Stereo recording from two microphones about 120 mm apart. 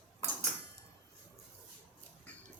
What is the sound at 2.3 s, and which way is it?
Duck, 10° left (ahead or behind).